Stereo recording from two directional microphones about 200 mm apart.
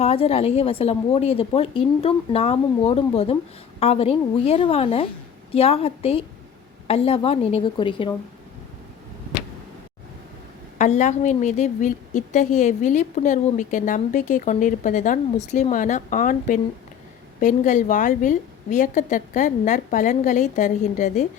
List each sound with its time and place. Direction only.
0.0 s a woman's voice: 30° left (ahead or behind)
10.8 s a woman's voice: 40° left (ahead or behind)